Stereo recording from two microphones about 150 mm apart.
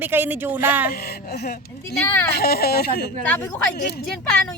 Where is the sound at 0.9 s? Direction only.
90° left.